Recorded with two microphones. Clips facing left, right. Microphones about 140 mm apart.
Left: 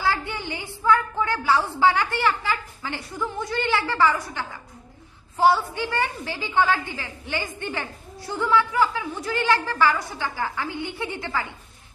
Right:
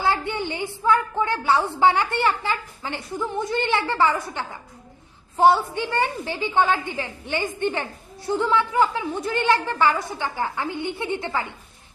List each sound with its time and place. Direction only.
0.0 s a woman's voice: 20° right (ahead or behind)